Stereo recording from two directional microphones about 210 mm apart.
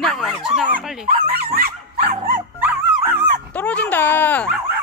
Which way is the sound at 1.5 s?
40° right (ahead or behind).